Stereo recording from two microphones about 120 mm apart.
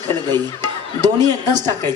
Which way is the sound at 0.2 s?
35° right (ahead or behind).